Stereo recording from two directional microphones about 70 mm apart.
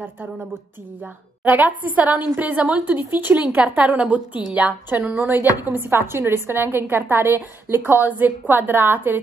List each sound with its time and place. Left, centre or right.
1.4 s a woman's voice: right
5.1 s a woman's voice: right
5.4 s a woman's voice: right